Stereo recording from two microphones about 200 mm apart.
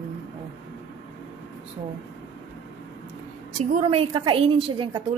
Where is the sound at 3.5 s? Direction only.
30° right (ahead or behind).